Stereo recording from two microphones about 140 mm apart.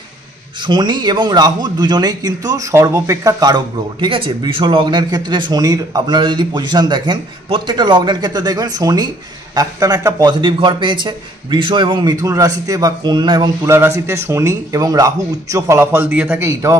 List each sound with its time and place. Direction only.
0.7 s speech: 30° right (ahead or behind)
13.7 s a man's voice: 20° right (ahead or behind)